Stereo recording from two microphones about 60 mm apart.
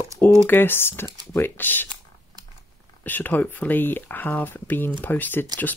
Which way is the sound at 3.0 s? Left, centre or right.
Left.